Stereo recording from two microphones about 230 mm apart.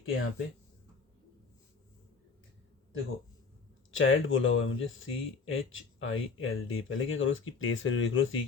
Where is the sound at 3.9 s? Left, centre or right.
Left.